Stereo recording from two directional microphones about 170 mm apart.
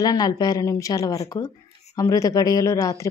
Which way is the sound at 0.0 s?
20° left (ahead or behind).